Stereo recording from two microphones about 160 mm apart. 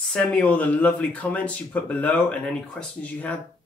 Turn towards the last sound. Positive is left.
turn(degrees=10)  # may be behind; listen again after turning